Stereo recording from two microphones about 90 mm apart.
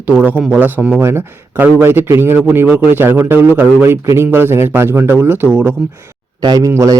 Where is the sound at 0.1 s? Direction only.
20° right (ahead or behind).